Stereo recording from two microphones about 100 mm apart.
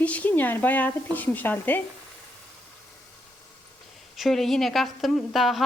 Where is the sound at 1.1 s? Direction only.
15° left (ahead or behind).